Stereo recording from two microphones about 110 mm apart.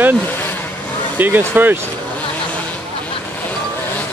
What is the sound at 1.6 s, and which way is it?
Speech, 20° right (ahead or behind).